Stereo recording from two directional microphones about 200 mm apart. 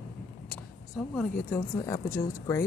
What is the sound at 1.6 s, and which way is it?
Speech, 20° left (ahead or behind).